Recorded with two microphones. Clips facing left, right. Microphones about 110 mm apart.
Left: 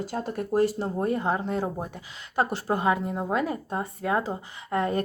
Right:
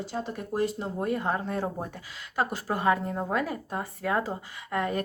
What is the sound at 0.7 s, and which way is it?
Speech, 35° left (ahead or behind).